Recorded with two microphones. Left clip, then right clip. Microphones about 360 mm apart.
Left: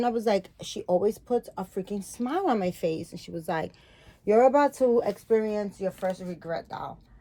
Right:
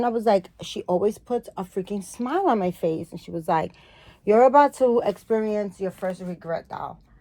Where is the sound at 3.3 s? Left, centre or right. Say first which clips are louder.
Right 7 dB; centre.